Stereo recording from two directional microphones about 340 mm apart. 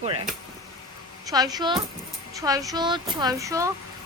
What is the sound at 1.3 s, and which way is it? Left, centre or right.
Speech, centre.